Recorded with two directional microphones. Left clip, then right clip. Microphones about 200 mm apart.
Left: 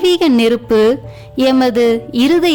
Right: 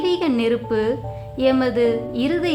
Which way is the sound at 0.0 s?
50° left (ahead or behind).